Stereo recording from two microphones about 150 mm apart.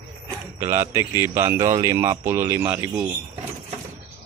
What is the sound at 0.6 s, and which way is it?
Speech, 20° right (ahead or behind).